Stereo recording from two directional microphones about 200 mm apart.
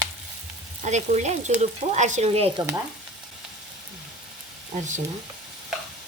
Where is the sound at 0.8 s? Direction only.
35° right (ahead or behind).